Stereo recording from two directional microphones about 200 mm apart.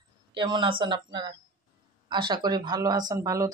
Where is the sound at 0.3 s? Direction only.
25° right (ahead or behind).